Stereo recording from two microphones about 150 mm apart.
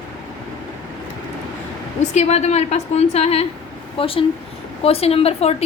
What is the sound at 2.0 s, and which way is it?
A woman's voice, 50° left (ahead or behind).